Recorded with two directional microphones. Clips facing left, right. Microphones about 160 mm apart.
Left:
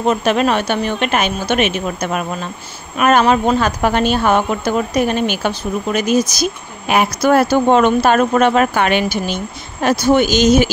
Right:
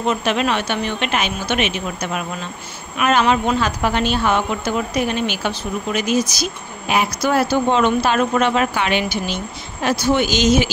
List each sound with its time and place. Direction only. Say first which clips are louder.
0.0 s a woman's voice: left 4 dB; 45° left (ahead or behind)